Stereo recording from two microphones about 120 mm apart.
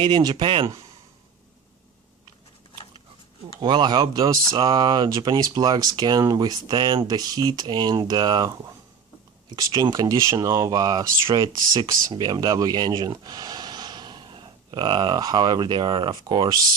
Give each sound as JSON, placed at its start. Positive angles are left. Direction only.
{"t": 0.0, "sound": "speech", "side_deg": -35}
{"t": 3.6, "sound": "speech", "side_deg": -40}
{"t": 9.6, "sound": "speech", "side_deg": -30}